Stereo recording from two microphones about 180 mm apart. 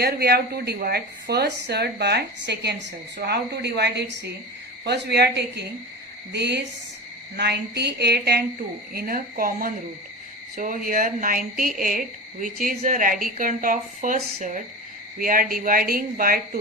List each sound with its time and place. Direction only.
0.0 s a woman's voice: 60° right (ahead or behind)